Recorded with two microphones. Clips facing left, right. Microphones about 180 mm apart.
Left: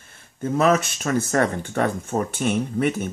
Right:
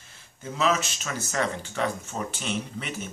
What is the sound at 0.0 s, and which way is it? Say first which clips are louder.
Speech: left 11 dB; 55° left (ahead or behind).